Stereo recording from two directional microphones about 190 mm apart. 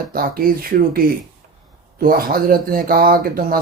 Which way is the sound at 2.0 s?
50° right (ahead or behind).